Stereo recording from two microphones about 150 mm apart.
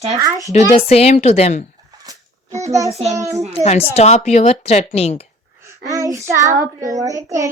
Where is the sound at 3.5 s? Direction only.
45° left (ahead or behind).